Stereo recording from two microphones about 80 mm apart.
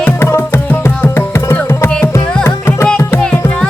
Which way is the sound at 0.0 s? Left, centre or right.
Left.